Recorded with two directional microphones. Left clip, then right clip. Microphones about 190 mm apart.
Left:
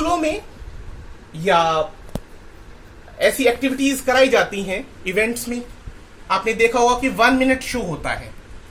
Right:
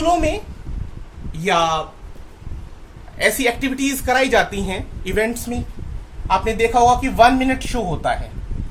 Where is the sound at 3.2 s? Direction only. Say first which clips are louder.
Left 1 dB; 30° right (ahead or behind).